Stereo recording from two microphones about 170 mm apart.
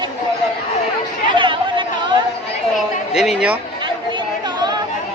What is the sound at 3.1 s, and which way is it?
Speech, centre (ahead or behind).